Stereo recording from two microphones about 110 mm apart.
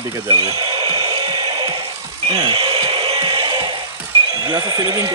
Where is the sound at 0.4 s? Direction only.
40° right (ahead or behind).